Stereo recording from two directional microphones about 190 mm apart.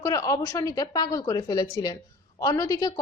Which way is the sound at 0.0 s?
15° left (ahead or behind).